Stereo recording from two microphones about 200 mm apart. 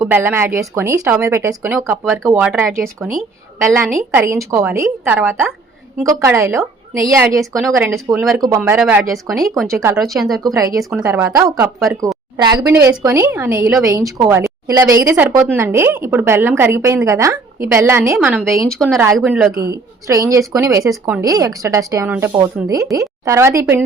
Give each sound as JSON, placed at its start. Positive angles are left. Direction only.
{"t": 0.0, "sound": "speech", "side_deg": -10}
{"t": 9.9, "sound": "speech", "side_deg": 0}
{"t": 18.7, "sound": "speech", "side_deg": 0}
{"t": 19.5, "sound": "speech", "side_deg": -15}